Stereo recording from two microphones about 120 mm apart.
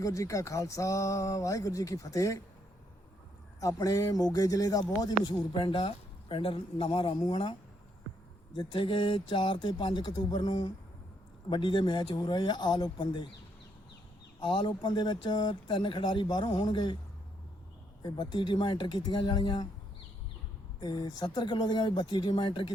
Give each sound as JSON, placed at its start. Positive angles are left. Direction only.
{"t": 0.0, "sound": "speech", "side_deg": 25}
{"t": 3.6, "sound": "speech", "side_deg": 30}
{"t": 5.5, "sound": "speech", "side_deg": 45}
{"t": 8.5, "sound": "speech", "side_deg": 45}
{"t": 14.4, "sound": "speech", "side_deg": 40}
{"t": 18.0, "sound": "speech", "side_deg": 40}
{"t": 20.8, "sound": "speech", "side_deg": 35}